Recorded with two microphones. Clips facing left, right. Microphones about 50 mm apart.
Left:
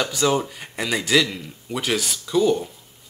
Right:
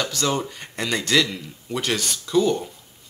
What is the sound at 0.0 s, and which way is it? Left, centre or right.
Speech, centre.